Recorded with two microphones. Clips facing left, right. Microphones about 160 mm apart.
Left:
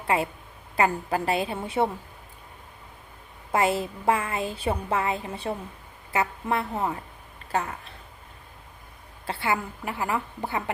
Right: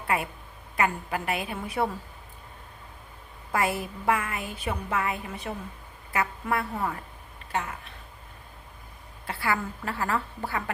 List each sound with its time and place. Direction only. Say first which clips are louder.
0.1 s a woman's voice: left 3 dB; 25° left (ahead or behind)
3.5 s a woman's voice: left 4 dB; 25° left (ahead or behind)
9.2 s a woman's voice: left 1 dB; 25° left (ahead or behind)